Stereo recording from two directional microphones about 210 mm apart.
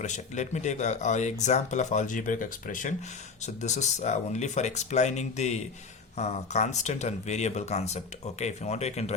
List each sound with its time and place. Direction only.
0.0 s speech: 35° left (ahead or behind)